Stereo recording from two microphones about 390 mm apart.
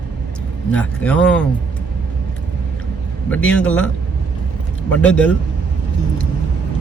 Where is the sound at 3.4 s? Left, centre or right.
Centre.